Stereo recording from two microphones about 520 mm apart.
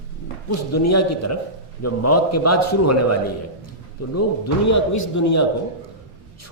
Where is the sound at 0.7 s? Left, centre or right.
Left.